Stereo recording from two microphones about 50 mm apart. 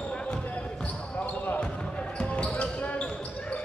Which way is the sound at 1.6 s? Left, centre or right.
Centre.